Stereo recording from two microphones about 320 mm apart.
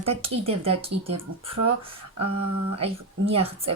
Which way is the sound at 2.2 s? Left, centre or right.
Right.